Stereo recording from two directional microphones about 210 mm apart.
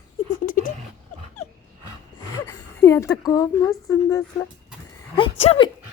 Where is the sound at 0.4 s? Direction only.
40° left (ahead or behind).